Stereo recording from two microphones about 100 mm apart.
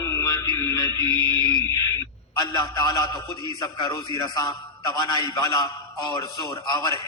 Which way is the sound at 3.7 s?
45° left (ahead or behind).